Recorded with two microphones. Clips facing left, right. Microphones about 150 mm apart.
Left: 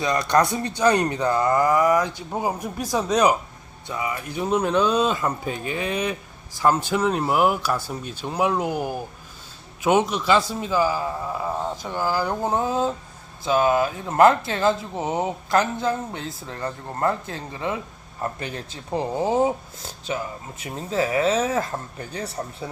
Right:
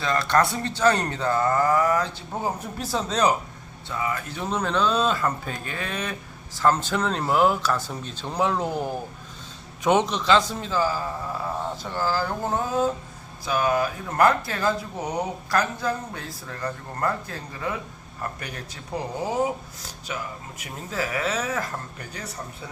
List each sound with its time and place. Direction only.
0.0 s speech: 15° left (ahead or behind)